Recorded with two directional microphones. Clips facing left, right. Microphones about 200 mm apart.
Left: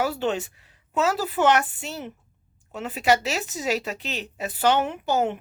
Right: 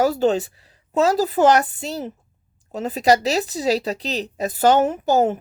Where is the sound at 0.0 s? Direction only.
40° right (ahead or behind).